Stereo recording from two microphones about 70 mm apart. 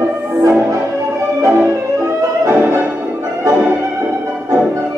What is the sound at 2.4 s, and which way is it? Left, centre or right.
Music, right.